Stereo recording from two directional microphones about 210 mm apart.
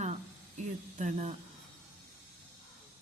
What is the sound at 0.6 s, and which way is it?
Speech, 35° right (ahead or behind).